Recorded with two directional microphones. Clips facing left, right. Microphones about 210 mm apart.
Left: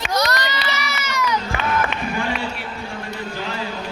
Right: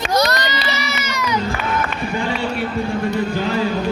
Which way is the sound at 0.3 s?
20° right (ahead or behind).